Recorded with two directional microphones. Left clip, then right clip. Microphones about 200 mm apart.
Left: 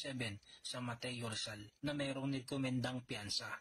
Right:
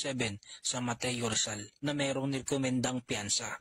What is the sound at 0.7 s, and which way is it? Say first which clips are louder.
Speech: right 9 dB; 50° right (ahead or behind).